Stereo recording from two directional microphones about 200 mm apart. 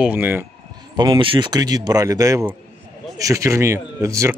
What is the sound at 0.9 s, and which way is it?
Speech, 25° right (ahead or behind).